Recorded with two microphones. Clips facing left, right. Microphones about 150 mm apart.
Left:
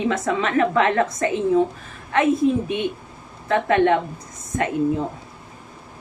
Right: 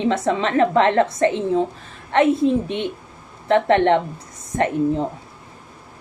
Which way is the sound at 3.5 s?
30° right (ahead or behind).